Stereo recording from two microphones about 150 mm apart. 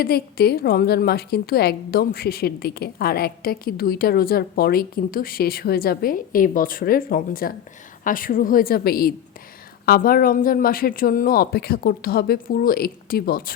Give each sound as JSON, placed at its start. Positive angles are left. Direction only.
{"t": 0.0, "sound": "a woman's voice", "side_deg": 90}